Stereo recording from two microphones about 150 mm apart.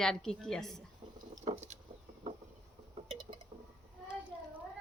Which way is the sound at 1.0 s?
35° right (ahead or behind).